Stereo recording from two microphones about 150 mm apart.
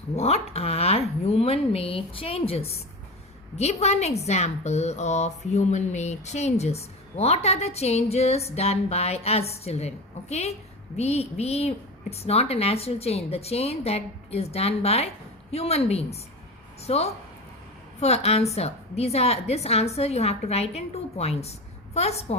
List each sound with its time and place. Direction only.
0.2 s a woman's voice: 45° left (ahead or behind)